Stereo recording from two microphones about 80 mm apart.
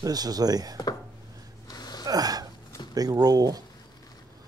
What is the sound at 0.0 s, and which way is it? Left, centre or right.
Speech, right.